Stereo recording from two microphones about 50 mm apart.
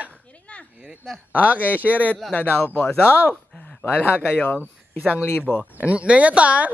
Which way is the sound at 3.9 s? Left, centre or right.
Left.